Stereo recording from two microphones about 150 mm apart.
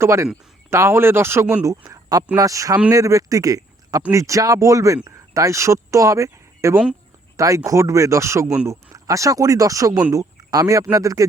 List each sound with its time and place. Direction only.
0.0 s speech: 15° right (ahead or behind)